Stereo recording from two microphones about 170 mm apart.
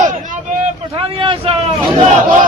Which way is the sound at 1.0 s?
30° right (ahead or behind).